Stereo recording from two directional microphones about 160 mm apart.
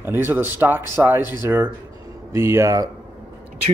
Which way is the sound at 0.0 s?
15° right (ahead or behind).